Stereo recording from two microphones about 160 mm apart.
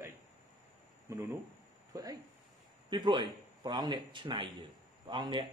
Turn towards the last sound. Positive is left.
turn(degrees=-30)  # may be behind; listen again after turning